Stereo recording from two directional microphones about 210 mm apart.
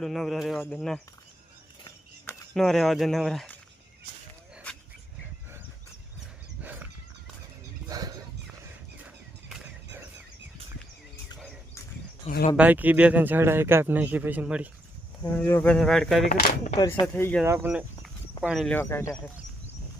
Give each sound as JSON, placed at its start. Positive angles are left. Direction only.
{"t": 0.0, "sound": "speech", "side_deg": 0}
{"t": 2.6, "sound": "speech", "side_deg": 0}
{"t": 6.6, "sound": "a sound", "side_deg": -10}
{"t": 7.9, "sound": "a sound", "side_deg": -15}
{"t": 12.5, "sound": "speech", "side_deg": -10}
{"t": 15.2, "sound": "speech", "side_deg": 10}
{"t": 16.3, "sound": "speech", "side_deg": 40}
{"t": 17.0, "sound": "speech", "side_deg": 10}
{"t": 17.4, "sound": "speech", "side_deg": -10}